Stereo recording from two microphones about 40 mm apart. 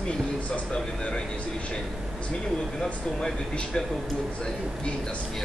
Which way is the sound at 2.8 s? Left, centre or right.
Centre.